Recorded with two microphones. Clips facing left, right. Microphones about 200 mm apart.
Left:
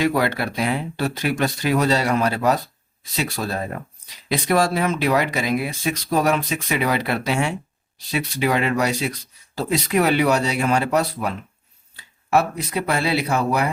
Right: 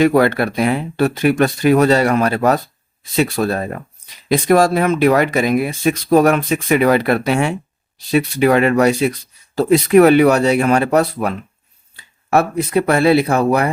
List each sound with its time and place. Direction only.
0.0 s speech: 55° right (ahead or behind)
4.3 s speech: 50° right (ahead or behind)